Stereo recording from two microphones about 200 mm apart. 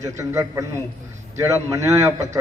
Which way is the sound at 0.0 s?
15° right (ahead or behind).